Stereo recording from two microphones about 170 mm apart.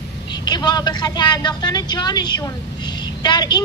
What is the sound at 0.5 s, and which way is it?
A woman's voice, 25° left (ahead or behind).